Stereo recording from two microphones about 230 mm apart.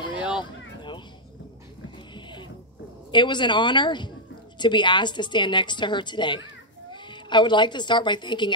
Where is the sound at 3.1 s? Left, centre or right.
Centre.